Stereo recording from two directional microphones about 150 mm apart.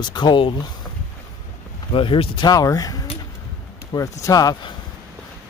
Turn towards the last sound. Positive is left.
turn(degrees=25)  # may be behind; listen again after turning